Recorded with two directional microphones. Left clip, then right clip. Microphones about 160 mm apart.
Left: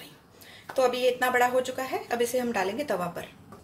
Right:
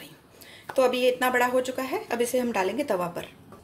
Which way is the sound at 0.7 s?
35° right (ahead or behind).